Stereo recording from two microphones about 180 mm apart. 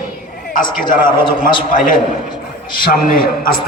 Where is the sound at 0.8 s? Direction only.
25° left (ahead or behind).